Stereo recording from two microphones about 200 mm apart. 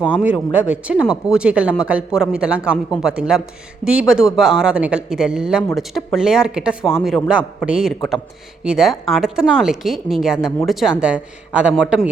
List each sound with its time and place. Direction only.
0.0 s speech: 5° right (ahead or behind)